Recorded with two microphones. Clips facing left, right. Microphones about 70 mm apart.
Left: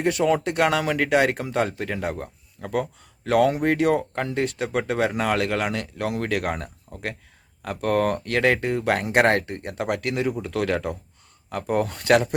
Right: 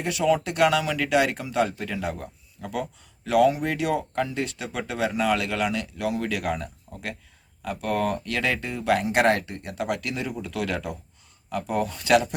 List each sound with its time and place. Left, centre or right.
0.0 s speech: left